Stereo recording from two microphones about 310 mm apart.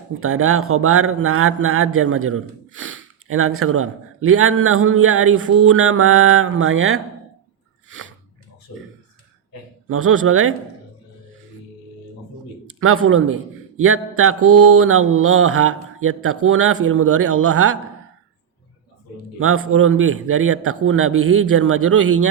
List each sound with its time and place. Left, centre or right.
0.2 s a man's voice: right
9.9 s a man's voice: right
12.8 s a man's voice: right
19.4 s a man's voice: right